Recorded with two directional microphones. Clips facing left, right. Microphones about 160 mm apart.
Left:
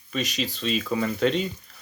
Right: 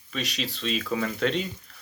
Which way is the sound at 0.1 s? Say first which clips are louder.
Left 3 dB; centre (ahead or behind).